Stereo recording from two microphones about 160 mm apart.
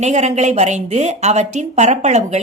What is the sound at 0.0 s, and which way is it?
Speech, 45° right (ahead or behind).